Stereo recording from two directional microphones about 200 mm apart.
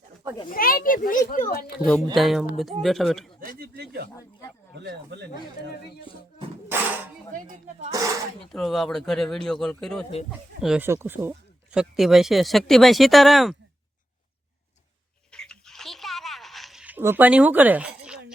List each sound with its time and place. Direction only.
0.4 s a child's voice: 45° left (ahead or behind)
1.8 s speech: 5° left (ahead or behind)
3.4 s speech: 55° right (ahead or behind)
6.7 s a sound: 10° right (ahead or behind)
7.3 s speech: 40° right (ahead or behind)
8.4 s speech: centre (ahead or behind)
15.3 s a sound: 5° left (ahead or behind)